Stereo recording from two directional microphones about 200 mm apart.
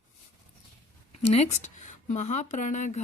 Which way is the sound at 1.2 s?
30° left (ahead or behind).